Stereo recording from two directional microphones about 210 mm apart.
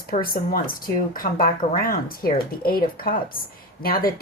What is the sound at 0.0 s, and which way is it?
A woman's voice, 45° left (ahead or behind).